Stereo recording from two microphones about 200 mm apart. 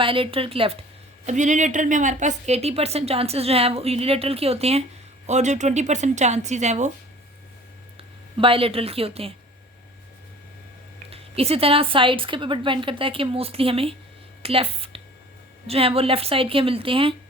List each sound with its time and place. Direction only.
0.0 s a woman's voice: 25° right (ahead or behind)
8.4 s a woman's voice: 25° right (ahead or behind)
11.1 s a woman's voice: 30° right (ahead or behind)
14.4 s a sound: 30° right (ahead or behind)
15.6 s a woman's voice: 30° right (ahead or behind)